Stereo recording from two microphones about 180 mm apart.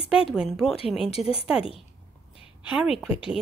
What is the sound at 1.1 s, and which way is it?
Speech, 35° left (ahead or behind).